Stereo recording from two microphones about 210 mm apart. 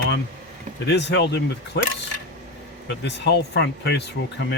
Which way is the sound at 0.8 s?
55° left (ahead or behind).